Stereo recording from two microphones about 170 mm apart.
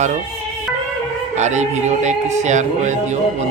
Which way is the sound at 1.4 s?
45° right (ahead or behind).